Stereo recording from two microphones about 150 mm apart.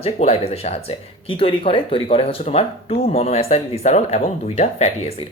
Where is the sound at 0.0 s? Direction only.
45° left (ahead or behind).